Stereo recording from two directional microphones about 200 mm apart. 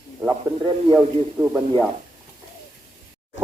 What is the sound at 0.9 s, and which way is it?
Speech, 5° right (ahead or behind).